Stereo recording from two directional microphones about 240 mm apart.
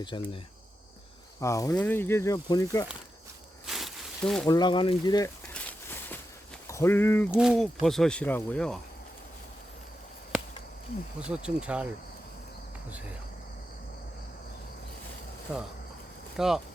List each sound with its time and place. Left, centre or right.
0.0 s cricket: centre
1.4 s speech: centre
3.7 s a sound: centre
4.4 s speech: centre
5.5 s a sound: centre
6.7 s speech: centre
7.3 s speech: centre
11.2 s speech: centre
15.5 s speech: centre